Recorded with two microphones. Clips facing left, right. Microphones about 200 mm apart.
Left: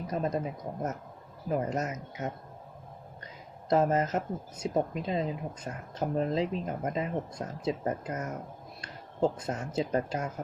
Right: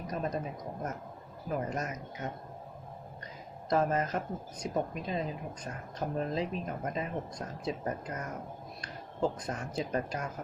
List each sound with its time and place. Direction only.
0.1 s speech: 25° left (ahead or behind)
1.5 s a woman's voice: 25° left (ahead or behind)
3.7 s a woman's voice: 25° left (ahead or behind)